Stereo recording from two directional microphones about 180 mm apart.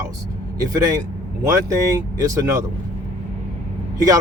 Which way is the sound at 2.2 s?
20° right (ahead or behind).